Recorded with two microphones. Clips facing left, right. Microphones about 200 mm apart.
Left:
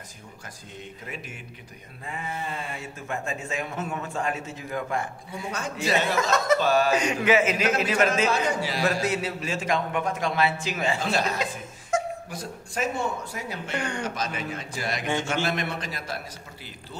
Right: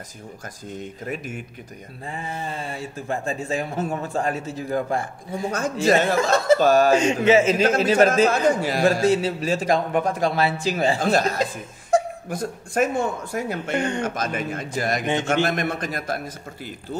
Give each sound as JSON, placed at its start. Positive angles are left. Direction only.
{"t": 0.7, "sound": "a man's voice", "side_deg": -45}
{"t": 2.0, "sound": "a man's voice", "side_deg": -30}
{"t": 6.3, "sound": "speech", "side_deg": -30}
{"t": 6.6, "sound": "a man's voice", "side_deg": -45}
{"t": 6.9, "sound": "a man's voice", "side_deg": -25}
{"t": 8.1, "sound": "a man's voice", "side_deg": -50}
{"t": 8.8, "sound": "speech", "side_deg": -30}
{"t": 11.0, "sound": "a man's voice", "side_deg": -45}
{"t": 11.9, "sound": "chuckle", "side_deg": -35}
{"t": 12.3, "sound": "a man's voice", "side_deg": -50}
{"t": 13.7, "sound": "a man's voice", "side_deg": -20}
{"t": 14.0, "sound": "a man's voice", "side_deg": -50}